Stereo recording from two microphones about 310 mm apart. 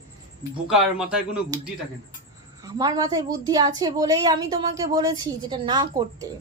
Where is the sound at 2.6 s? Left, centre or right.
Centre.